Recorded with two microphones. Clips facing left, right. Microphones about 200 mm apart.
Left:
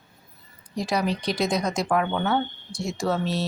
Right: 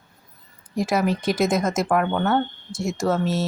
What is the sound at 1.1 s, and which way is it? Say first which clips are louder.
Speech: right 4 dB; 50° right (ahead or behind).